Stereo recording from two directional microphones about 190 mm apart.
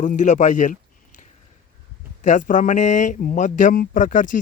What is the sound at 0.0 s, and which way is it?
Speech, 40° left (ahead or behind).